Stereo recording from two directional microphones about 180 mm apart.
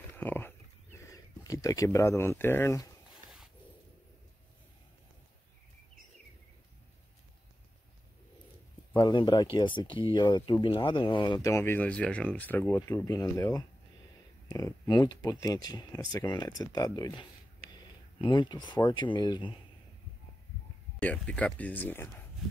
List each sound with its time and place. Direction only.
0.1 s a sound: 10° left (ahead or behind)
8.9 s speech: 25° left (ahead or behind)
21.0 s speech: 10° left (ahead or behind)